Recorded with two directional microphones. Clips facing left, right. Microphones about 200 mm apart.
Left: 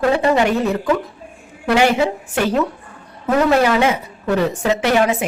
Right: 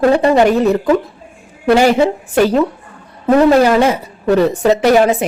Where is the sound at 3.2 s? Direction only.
40° right (ahead or behind).